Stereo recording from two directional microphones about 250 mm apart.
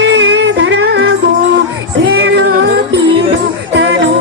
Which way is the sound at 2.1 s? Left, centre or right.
Right.